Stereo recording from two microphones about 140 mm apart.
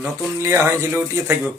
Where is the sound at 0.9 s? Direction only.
15° right (ahead or behind).